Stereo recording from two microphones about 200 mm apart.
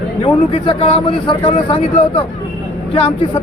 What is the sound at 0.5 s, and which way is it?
Speech, 25° left (ahead or behind).